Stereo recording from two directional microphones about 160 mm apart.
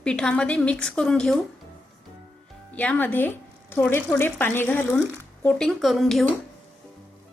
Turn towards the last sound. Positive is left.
turn(degrees=0)  # may be behind; listen again after turning